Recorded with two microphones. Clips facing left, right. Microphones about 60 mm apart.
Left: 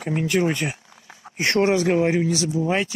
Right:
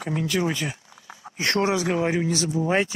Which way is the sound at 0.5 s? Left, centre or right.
Left.